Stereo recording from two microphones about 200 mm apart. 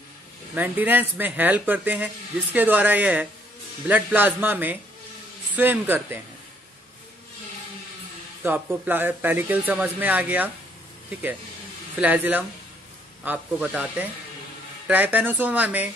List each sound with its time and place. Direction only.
0.6 s speech: 10° right (ahead or behind)
8.4 s speech: 10° right (ahead or behind)
12.0 s speech: 10° right (ahead or behind)